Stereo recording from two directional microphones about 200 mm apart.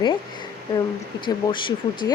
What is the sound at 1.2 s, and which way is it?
Speech, 25° left (ahead or behind).